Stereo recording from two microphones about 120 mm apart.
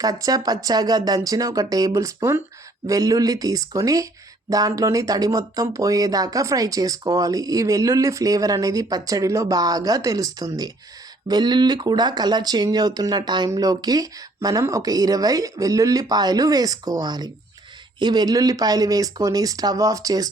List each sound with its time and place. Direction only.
0.0 s speech: 30° right (ahead or behind)